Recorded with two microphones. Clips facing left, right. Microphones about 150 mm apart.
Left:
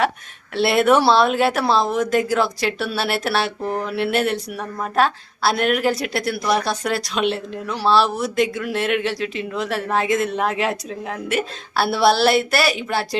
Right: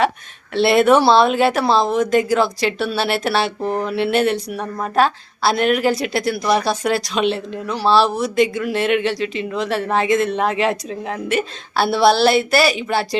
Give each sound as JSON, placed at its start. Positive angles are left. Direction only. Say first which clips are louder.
{"t": 0.5, "sound": "a woman's voice", "louder": "right 3 dB", "side_deg": 0}